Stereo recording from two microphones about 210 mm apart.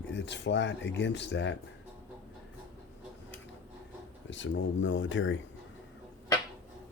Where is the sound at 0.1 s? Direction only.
55° left (ahead or behind).